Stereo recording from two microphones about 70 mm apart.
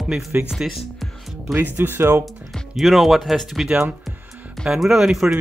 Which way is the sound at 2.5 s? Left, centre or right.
Centre.